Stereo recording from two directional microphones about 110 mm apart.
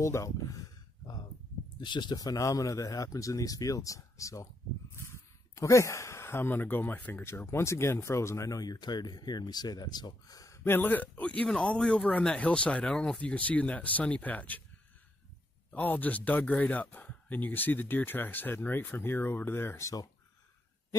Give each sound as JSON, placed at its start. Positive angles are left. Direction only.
{"t": 0.0, "sound": "a sound", "side_deg": 25}
{"t": 1.8, "sound": "speech", "side_deg": 45}
{"t": 5.5, "sound": "speech", "side_deg": 25}
{"t": 15.7, "sound": "speech", "side_deg": 15}